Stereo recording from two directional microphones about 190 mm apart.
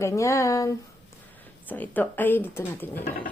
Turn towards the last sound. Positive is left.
turn(degrees=10)  # may be behind; listen again after turning